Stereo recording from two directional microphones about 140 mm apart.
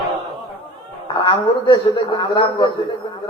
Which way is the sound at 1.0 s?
35° left (ahead or behind).